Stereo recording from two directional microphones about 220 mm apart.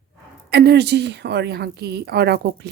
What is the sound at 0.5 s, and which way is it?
Speech, 50° right (ahead or behind).